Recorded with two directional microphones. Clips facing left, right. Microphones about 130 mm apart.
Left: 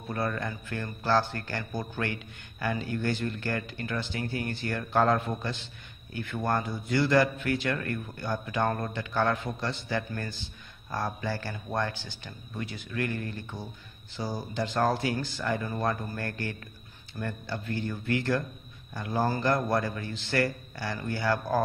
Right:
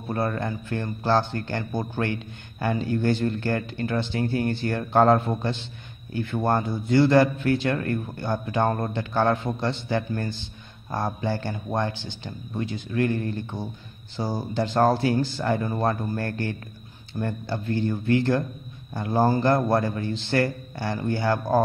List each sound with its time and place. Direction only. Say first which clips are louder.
0.1 s a man's voice: right 5 dB; 30° right (ahead or behind)